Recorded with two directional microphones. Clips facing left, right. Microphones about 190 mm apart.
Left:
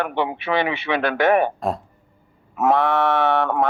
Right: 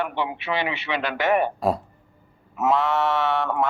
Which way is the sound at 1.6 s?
5° right (ahead or behind).